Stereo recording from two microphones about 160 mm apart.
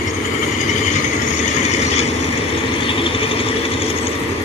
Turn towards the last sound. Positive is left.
turn(degrees=35)  # may be behind; listen again after turning